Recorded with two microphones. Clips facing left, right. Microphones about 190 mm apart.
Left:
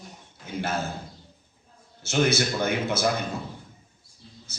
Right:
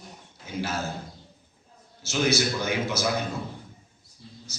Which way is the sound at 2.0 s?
55° left (ahead or behind).